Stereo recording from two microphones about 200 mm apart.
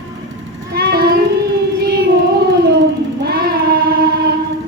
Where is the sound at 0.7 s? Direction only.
50° right (ahead or behind).